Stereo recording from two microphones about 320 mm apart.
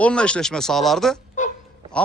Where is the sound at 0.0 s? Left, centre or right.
Centre.